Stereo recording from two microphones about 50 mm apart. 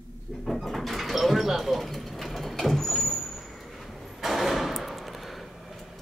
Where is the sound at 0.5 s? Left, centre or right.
Centre.